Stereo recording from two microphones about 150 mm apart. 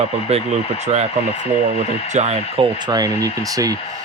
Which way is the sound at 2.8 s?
25° right (ahead or behind).